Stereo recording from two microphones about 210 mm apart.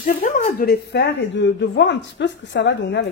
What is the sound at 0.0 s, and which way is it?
A woman's voice, 40° left (ahead or behind).